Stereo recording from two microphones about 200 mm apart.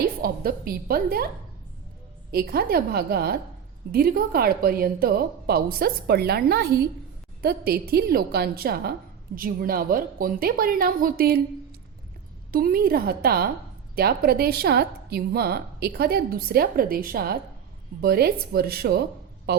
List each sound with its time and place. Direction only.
0.2 s a woman's voice: 50° right (ahead or behind)
2.3 s a woman's voice: 50° right (ahead or behind)
12.5 s a woman's voice: 50° right (ahead or behind)